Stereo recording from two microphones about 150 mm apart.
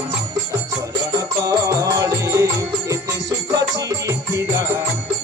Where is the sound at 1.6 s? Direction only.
20° right (ahead or behind).